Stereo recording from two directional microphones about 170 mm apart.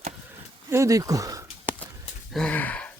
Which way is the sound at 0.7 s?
20° right (ahead or behind).